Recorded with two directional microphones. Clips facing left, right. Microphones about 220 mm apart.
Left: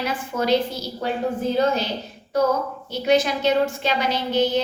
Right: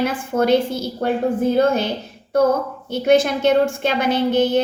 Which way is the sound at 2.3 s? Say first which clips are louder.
Right 4 dB; 55° right (ahead or behind).